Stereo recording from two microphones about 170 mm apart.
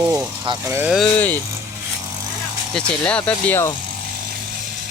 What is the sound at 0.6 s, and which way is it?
Speech, 15° right (ahead or behind).